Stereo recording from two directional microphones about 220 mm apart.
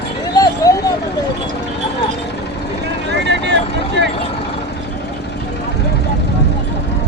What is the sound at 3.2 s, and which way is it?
Vehicle, 55° right (ahead or behind).